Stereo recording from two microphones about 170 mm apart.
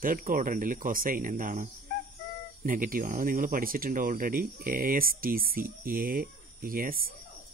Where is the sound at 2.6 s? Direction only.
55° right (ahead or behind).